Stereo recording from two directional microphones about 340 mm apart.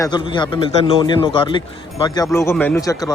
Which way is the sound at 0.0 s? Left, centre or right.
Centre.